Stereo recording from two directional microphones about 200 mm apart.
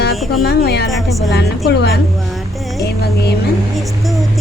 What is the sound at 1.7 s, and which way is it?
Speech, 55° left (ahead or behind).